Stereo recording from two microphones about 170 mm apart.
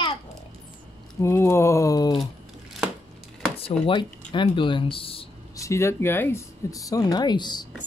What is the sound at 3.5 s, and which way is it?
Speech, 30° left (ahead or behind).